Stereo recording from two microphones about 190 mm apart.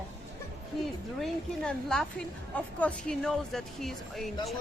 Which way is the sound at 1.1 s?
Centre (ahead or behind).